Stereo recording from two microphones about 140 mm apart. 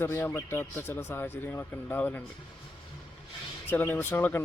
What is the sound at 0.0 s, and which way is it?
Speech, 15° left (ahead or behind).